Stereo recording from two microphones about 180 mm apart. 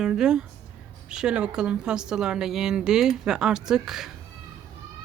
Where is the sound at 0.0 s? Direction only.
5° right (ahead or behind).